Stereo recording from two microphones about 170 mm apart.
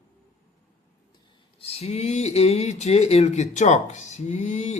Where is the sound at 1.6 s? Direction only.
35° left (ahead or behind).